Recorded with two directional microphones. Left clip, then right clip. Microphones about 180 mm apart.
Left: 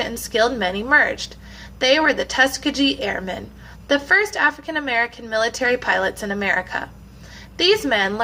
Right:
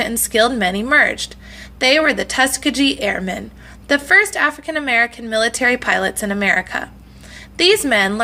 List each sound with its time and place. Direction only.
0.0 s a woman's voice: 40° right (ahead or behind)